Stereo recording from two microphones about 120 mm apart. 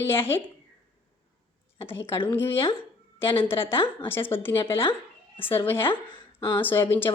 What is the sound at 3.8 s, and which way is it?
Speech, 20° left (ahead or behind).